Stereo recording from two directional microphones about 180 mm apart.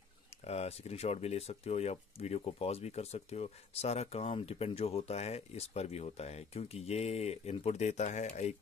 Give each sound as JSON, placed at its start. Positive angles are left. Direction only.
{"t": 0.5, "sound": "speech", "side_deg": 35}